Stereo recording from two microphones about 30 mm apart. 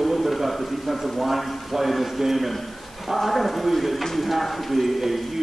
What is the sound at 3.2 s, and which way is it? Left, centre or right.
A man's voice, centre.